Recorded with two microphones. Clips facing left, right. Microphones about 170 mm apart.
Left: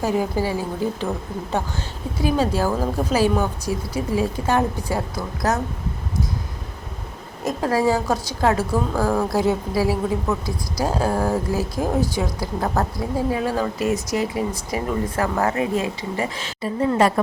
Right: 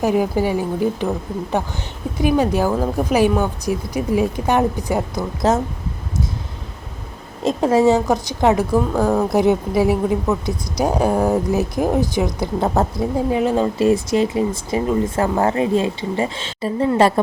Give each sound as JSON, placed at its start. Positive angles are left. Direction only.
{"t": 0.0, "sound": "a woman's voice", "side_deg": -15}
{"t": 2.2, "sound": "a woman's voice", "side_deg": -15}
{"t": 7.4, "sound": "a woman's voice", "side_deg": -25}